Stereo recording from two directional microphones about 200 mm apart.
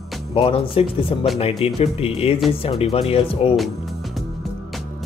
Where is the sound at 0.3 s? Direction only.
30° left (ahead or behind).